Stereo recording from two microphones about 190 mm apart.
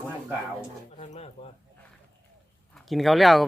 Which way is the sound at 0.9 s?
35° left (ahead or behind).